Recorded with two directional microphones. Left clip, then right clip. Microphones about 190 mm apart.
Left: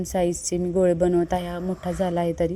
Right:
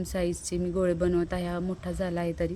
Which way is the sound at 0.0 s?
10° left (ahead or behind).